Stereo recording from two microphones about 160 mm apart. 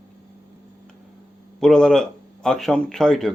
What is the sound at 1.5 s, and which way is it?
Speech, 5° left (ahead or behind).